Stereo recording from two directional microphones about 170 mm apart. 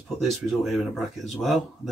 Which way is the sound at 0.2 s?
Centre (ahead or behind).